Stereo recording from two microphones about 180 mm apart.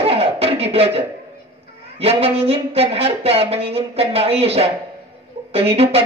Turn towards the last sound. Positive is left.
turn(degrees=-35)  # may be behind; listen again after turning